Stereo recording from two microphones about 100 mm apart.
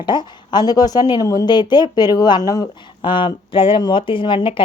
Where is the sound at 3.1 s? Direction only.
55° left (ahead or behind).